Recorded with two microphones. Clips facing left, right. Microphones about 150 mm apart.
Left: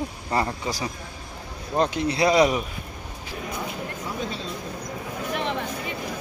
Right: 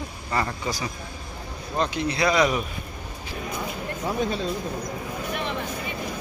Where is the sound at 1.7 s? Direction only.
40° left (ahead or behind).